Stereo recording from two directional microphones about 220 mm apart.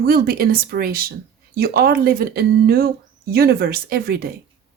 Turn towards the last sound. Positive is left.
turn(degrees=-45)  # may be behind; listen again after turning